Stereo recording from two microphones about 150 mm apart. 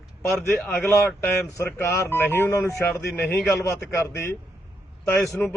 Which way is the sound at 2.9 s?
10° left (ahead or behind).